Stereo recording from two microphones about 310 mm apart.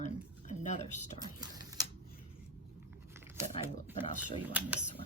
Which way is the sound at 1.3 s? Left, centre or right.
Centre.